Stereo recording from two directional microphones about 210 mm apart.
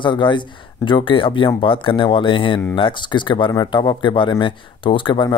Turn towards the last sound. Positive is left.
turn(degrees=25)  # may be behind; listen again after turning